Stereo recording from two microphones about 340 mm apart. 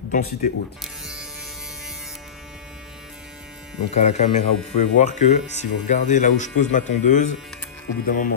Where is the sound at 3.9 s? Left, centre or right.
Centre.